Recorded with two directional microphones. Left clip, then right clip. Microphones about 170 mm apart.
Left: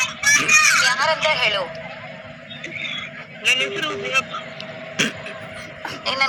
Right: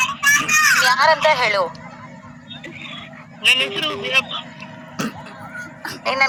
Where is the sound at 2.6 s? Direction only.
Centre (ahead or behind).